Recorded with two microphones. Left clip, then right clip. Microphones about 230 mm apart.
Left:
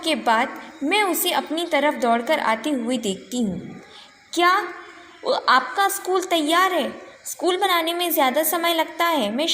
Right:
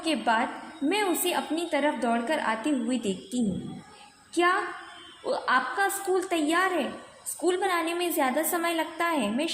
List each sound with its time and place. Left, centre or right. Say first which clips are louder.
0.0 s a woman's voice: left 6 dB; left